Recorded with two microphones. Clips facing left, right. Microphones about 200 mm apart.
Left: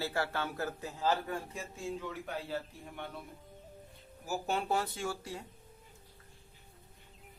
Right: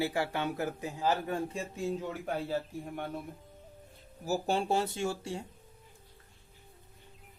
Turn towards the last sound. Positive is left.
turn(degrees=-25)  # may be behind; listen again after turning